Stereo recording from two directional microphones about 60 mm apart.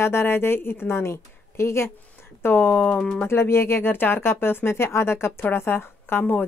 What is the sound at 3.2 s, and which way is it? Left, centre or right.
A woman's voice, left.